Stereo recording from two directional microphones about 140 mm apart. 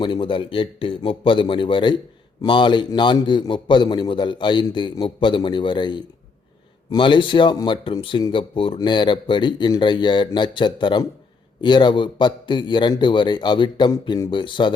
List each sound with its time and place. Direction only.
0.0 s speech: 35° left (ahead or behind)